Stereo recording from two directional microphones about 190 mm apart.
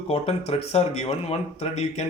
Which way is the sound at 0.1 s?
30° left (ahead or behind).